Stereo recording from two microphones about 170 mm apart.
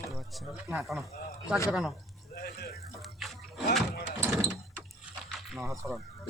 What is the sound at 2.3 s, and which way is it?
Speech, 65° left (ahead or behind).